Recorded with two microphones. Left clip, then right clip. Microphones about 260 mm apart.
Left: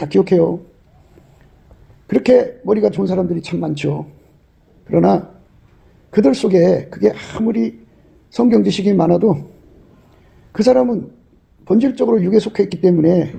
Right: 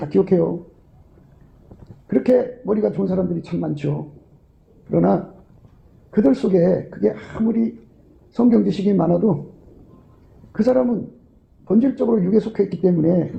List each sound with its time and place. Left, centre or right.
0.0 s a man's voice: left
2.0 s a man's voice: left
10.5 s a man's voice: left